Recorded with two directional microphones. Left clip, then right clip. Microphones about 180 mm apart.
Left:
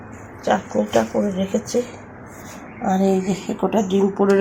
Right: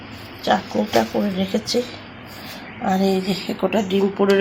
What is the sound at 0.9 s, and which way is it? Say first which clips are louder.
Speech: even; centre (ahead or behind).